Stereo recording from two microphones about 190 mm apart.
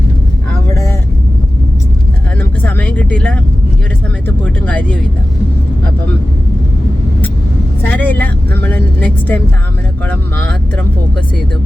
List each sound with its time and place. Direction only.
2.4 s vehicle: 10° left (ahead or behind)
7.8 s vehicle: 10° left (ahead or behind)